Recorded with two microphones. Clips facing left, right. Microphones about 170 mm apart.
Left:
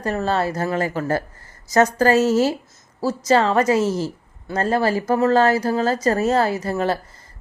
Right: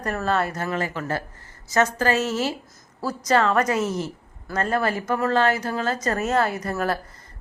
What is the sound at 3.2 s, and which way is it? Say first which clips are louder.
A woman's voice: left 3 dB; 30° left (ahead or behind).